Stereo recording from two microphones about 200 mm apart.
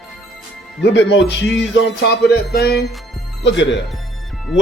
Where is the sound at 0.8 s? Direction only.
60° left (ahead or behind).